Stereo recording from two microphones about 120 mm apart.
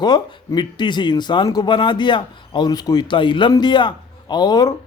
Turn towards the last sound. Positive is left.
turn(degrees=35)  # may be behind; listen again after turning